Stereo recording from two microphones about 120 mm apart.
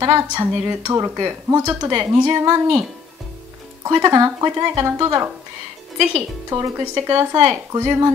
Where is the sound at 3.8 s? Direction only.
30° right (ahead or behind).